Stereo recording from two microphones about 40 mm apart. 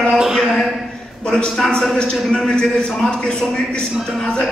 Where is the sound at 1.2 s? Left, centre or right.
Left.